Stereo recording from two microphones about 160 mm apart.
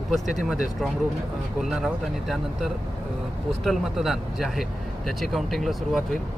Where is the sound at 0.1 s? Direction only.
Centre (ahead or behind).